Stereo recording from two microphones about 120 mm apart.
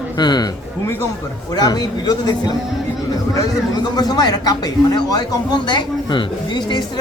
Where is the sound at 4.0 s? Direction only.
35° left (ahead or behind).